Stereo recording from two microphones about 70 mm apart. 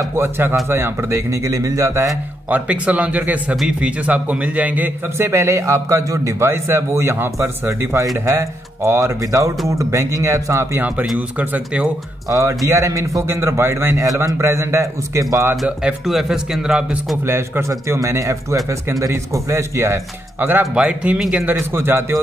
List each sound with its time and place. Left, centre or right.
0.1 s a man's voice: right
2.5 s a man's voice: centre; by 7.5 s right
7.6 s a man's voice: right
8.3 s a man's voice: right
11.1 s speech: right
12.3 s a man's voice: right
13.3 s a man's voice: right
16.1 s speech: centre
17.2 s a man's voice: right
20.3 s speech: right
20.7 s speech: centre
21.5 s a man's voice: right